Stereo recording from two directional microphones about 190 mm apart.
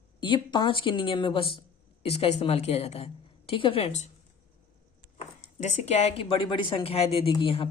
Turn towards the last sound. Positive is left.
turn(degrees=30)  # may be behind; listen again after turning